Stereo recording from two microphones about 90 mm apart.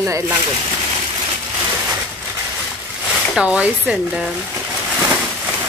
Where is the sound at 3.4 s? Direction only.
10° right (ahead or behind).